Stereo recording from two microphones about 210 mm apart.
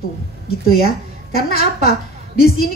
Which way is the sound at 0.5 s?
45° left (ahead or behind).